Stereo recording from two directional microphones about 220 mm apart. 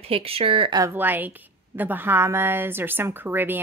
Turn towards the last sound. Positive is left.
turn(degrees=-10)  # may be behind; listen again after turning